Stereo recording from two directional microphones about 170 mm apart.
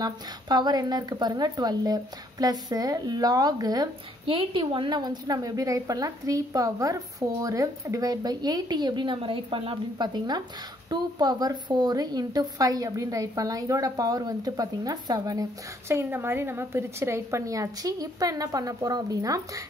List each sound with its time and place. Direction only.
0.0 s a woman's voice: 25° right (ahead or behind)